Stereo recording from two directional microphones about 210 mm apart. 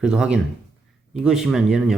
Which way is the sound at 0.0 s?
5° right (ahead or behind).